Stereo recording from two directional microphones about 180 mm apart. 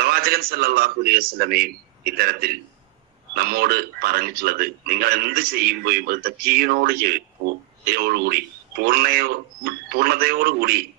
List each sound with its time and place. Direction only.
0.0 s a man's voice: 55° right (ahead or behind)